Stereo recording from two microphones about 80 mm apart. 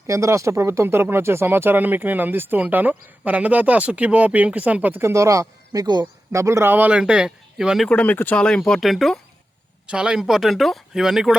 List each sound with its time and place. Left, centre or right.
0.1 s speech: right
5.0 s a man's voice: right
5.8 s speech: right
6.3 s speech: right; by 7.9 s centre
7.9 s speech: centre
8.4 s speech: centre
9.8 s speech: centre